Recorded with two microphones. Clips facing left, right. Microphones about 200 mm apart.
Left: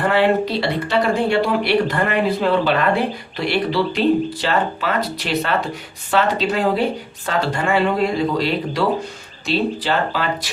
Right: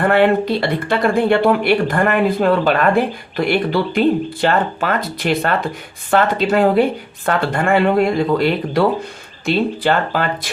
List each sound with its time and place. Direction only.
0.0 s speech: 55° right (ahead or behind)